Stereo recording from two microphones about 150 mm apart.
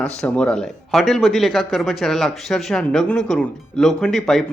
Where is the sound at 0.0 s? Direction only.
5° left (ahead or behind).